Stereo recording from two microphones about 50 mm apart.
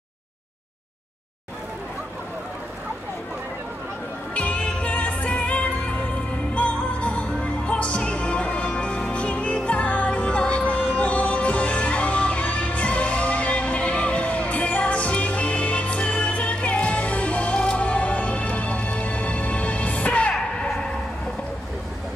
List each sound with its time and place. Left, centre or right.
4.3 s music: left